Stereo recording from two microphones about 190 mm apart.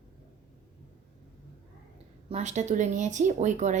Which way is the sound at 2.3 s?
35° right (ahead or behind).